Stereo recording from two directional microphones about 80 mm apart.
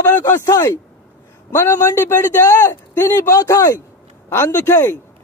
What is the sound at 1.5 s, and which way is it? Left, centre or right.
A man's voice, left.